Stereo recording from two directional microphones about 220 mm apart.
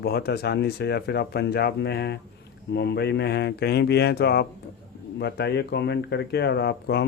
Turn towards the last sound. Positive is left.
turn(degrees=50)  # may be behind; listen again after turning